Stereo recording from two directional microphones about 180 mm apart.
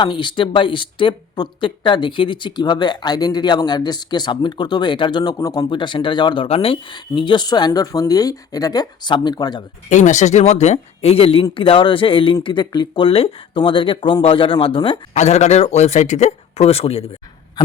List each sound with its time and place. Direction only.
0.0 s speech: 25° left (ahead or behind)
9.9 s speech: 40° left (ahead or behind)